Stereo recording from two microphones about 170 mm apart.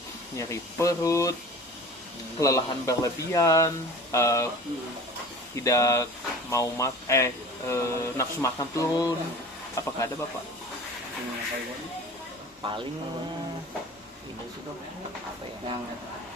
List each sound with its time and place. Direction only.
0.3 s speech: 20° left (ahead or behind)
2.4 s speech: 20° left (ahead or behind)
5.5 s speech: 20° left (ahead or behind)
12.6 s speech: 35° right (ahead or behind)